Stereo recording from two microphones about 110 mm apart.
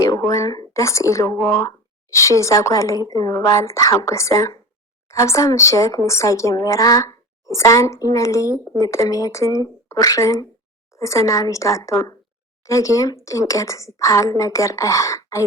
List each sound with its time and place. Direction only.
0.3 s speech: 35° left (ahead or behind)
8.4 s speech: 20° right (ahead or behind)
8.9 s speech: 30° left (ahead or behind)